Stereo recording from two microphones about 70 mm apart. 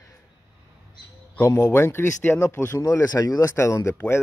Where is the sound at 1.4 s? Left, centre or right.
Left.